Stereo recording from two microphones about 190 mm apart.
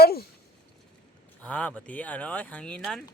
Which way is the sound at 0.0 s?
55° left (ahead or behind).